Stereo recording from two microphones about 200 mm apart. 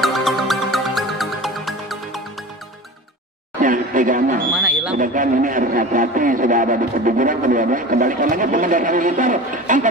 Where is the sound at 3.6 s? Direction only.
40° right (ahead or behind).